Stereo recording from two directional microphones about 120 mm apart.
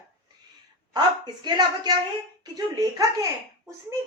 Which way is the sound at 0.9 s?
35° right (ahead or behind).